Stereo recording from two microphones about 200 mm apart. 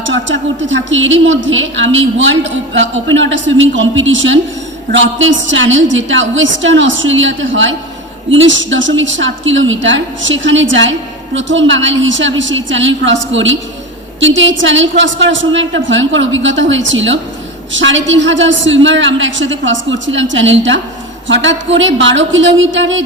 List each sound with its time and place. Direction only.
0.1 s a woman's voice: 70° right (ahead or behind)